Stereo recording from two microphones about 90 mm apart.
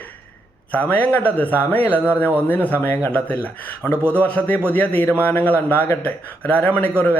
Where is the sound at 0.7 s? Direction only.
15° left (ahead or behind).